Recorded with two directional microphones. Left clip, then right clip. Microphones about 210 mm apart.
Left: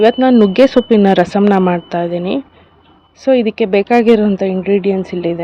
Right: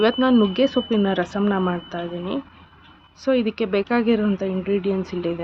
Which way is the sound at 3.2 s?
20° left (ahead or behind).